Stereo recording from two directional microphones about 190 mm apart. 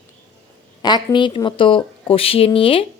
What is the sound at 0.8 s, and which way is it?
A woman's voice, 25° left (ahead or behind).